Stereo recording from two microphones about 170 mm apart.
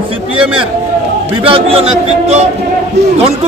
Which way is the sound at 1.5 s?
35° right (ahead or behind).